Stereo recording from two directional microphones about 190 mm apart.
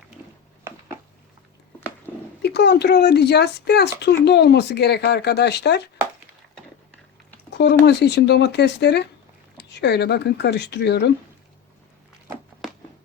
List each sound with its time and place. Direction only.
0.7 s a sound: 15° right (ahead or behind)
2.4 s speech: 60° left (ahead or behind)
7.5 s speech: 65° left (ahead or behind)